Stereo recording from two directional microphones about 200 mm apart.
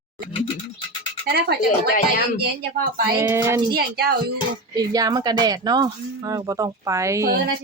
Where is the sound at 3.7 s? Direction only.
50° right (ahead or behind).